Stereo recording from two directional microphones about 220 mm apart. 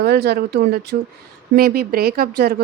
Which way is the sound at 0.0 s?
45° right (ahead or behind).